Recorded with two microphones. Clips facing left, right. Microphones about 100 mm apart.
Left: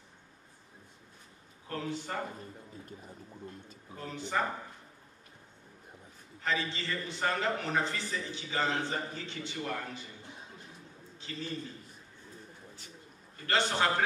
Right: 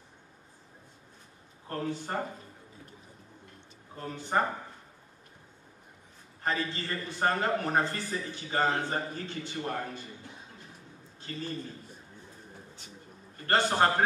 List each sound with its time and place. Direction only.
1.7 s a man's voice: 45° right (ahead or behind)
4.0 s a man's voice: 45° right (ahead or behind)
6.4 s a man's voice: 45° right (ahead or behind)
11.1 s a man's voice: 45° right (ahead or behind)
13.5 s a man's voice: 45° right (ahead or behind)